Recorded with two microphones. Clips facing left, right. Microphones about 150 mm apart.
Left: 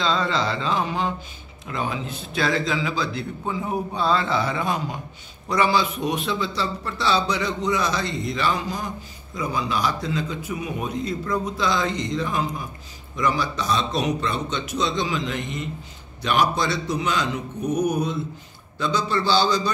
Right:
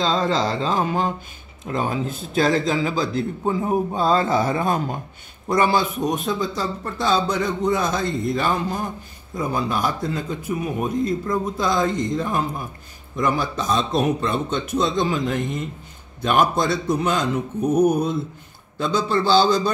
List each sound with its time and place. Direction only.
0.0 s speech: 45° right (ahead or behind)